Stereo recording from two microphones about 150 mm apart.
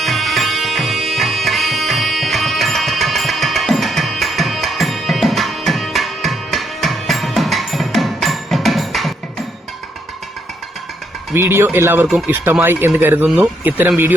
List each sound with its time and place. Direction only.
0.0 s music: centre (ahead or behind)
11.3 s speech: 15° right (ahead or behind)